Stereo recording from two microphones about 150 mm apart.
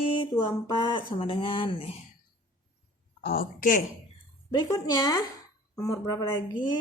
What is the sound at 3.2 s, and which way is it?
Speech, 75° left (ahead or behind).